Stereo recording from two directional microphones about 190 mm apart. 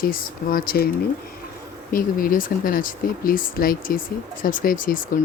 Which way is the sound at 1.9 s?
45° left (ahead or behind).